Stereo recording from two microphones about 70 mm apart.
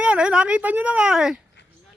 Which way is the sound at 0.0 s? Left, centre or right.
Centre.